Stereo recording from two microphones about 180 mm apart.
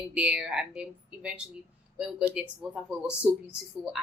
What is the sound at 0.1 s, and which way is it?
Speech, 5° right (ahead or behind).